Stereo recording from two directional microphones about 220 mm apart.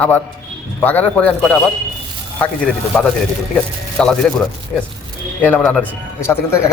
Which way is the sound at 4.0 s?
5° left (ahead or behind).